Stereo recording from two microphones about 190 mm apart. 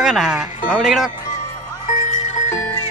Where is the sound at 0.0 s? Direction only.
5° right (ahead or behind).